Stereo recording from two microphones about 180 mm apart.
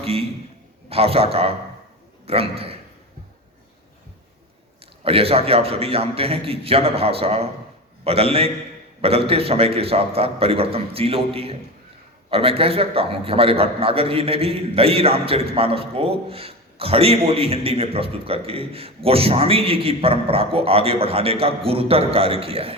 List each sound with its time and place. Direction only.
0.0 s a man's voice: 35° right (ahead or behind)
5.0 s a man's voice: 30° right (ahead or behind)